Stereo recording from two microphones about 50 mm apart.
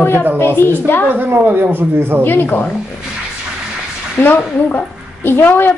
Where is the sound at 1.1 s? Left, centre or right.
Right.